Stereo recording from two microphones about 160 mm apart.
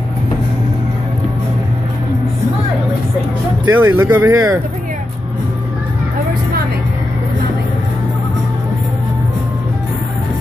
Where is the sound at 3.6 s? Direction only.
15° right (ahead or behind).